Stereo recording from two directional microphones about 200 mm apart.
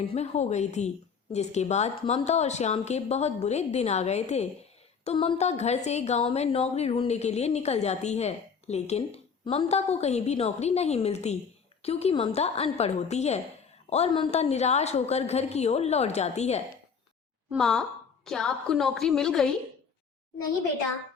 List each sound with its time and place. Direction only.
0.0 s speech: 30° left (ahead or behind)
17.5 s a woman's voice: centre (ahead or behind)